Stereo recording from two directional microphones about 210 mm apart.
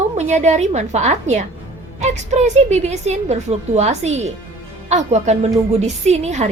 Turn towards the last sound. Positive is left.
turn(degrees=-35)  # may be behind; listen again after turning